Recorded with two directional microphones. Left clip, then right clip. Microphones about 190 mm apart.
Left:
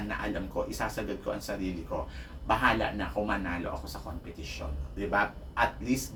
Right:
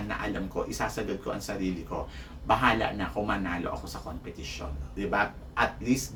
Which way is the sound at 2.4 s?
10° right (ahead or behind).